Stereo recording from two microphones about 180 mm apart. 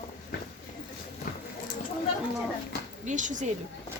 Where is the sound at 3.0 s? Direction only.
45° right (ahead or behind).